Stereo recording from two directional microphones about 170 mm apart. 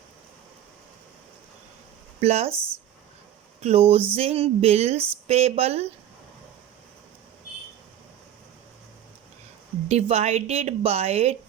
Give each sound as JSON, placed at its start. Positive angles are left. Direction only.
{"t": 2.2, "sound": "a woman's voice", "side_deg": -40}
{"t": 2.5, "sound": "speech", "side_deg": -15}
{"t": 3.6, "sound": "a woman's voice", "side_deg": -35}
{"t": 9.9, "sound": "a woman's voice", "side_deg": -40}